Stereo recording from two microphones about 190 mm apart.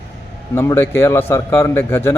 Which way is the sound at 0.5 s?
15° left (ahead or behind).